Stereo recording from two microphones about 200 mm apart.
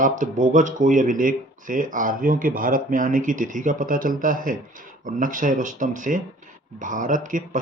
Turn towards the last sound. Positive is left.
turn(degrees=-40)  # may be behind; listen again after turning